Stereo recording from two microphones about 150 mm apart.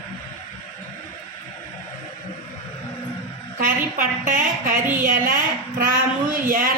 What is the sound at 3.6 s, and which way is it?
A woman's voice, 60° right (ahead or behind).